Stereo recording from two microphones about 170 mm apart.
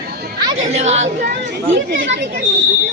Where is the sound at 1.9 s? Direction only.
90° right.